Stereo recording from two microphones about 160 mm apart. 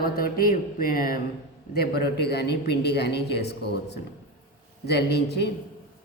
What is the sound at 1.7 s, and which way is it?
Speech, 80° left.